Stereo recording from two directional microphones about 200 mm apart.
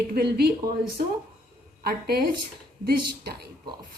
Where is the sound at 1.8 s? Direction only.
50° right (ahead or behind).